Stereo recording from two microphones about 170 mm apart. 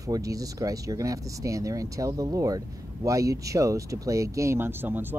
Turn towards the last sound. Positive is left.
turn(degrees=-10)  # may be behind; listen again after turning